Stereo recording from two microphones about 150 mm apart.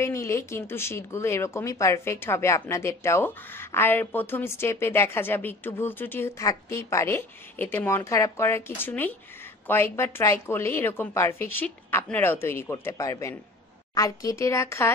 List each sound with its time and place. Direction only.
0.0 s speech: 20° left (ahead or behind)